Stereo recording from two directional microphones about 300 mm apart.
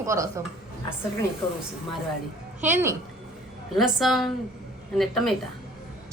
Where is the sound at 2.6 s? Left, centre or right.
Centre.